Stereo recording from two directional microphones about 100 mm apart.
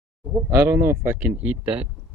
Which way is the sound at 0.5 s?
25° right (ahead or behind).